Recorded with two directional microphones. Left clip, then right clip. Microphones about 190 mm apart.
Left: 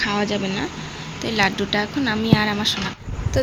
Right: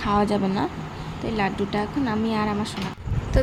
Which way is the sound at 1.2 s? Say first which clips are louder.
Left 5 dB; centre (ahead or behind).